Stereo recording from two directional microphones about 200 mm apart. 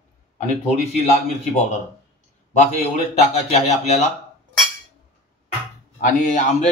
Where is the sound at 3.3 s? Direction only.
30° left (ahead or behind).